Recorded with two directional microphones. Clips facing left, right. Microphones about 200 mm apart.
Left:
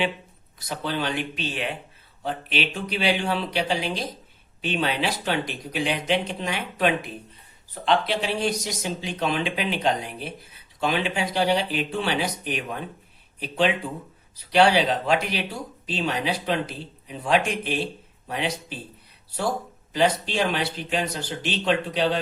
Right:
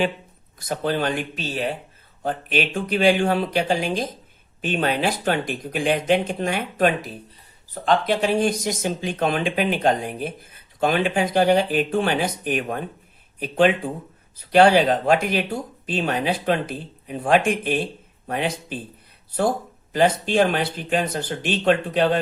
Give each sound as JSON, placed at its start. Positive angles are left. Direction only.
{"t": 0.6, "sound": "speech", "side_deg": -50}
{"t": 19.9, "sound": "speech", "side_deg": -50}